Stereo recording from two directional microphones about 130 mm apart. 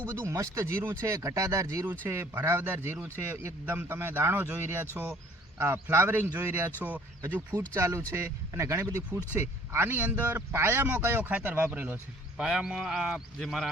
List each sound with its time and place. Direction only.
0.1 s speech: 20° right (ahead or behind)
7.8 s speech: 25° right (ahead or behind)
12.4 s speech: 5° right (ahead or behind)